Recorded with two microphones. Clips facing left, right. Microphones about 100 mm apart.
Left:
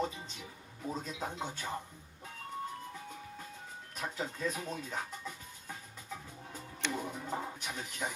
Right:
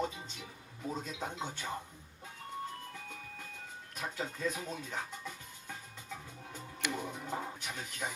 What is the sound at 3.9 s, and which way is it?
Speech, centre (ahead or behind).